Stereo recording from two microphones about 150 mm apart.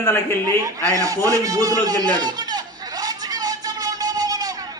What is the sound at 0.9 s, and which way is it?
A man's voice, 20° right (ahead or behind).